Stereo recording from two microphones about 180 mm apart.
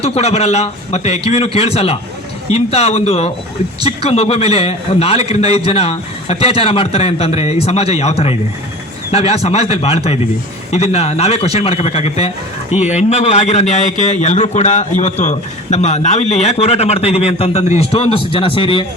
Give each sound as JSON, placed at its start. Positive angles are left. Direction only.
{"t": 0.0, "sound": "a man's voice", "side_deg": 35}